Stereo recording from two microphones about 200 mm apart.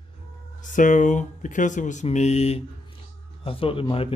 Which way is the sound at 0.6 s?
40° left (ahead or behind).